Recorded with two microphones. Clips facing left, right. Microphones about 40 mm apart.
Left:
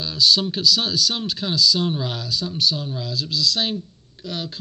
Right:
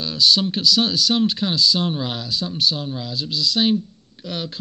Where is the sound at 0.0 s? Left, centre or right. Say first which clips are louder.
Right 1 dB; right.